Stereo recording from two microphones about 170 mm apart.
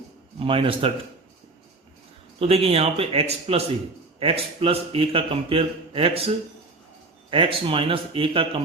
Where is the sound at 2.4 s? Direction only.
35° right (ahead or behind).